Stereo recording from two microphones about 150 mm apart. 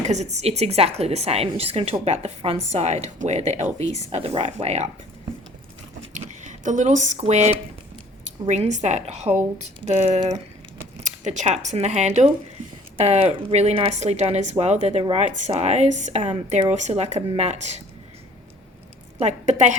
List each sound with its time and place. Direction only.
0.0 s a woman's voice: 50° right (ahead or behind)
6.1 s a woman's voice: 55° right (ahead or behind)
19.2 s a woman's voice: 50° right (ahead or behind)